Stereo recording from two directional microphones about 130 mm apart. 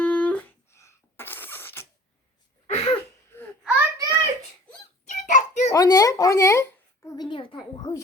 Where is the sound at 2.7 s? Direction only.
50° left (ahead or behind).